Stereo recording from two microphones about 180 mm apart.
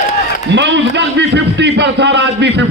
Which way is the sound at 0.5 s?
80° right.